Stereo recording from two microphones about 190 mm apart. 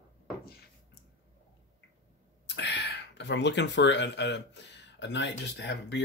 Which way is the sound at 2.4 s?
65° left (ahead or behind).